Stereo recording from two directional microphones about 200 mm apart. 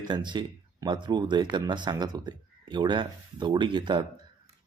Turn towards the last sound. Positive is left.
turn(degrees=-25)  # may be behind; listen again after turning